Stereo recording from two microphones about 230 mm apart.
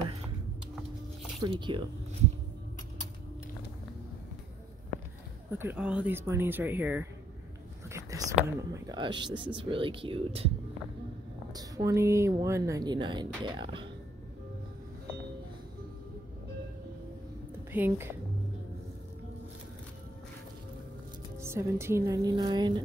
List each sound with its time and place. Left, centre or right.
1.4 s speech: centre
5.6 s speech: centre; by 10.5 s right
11.5 s speech: centre
17.7 s speech: centre
21.4 s speech: centre